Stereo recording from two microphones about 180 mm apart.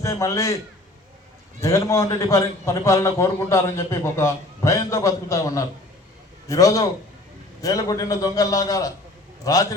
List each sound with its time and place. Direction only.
0.0 s a man's voice: 15° left (ahead or behind)
1.6 s a man's voice: 15° left (ahead or behind)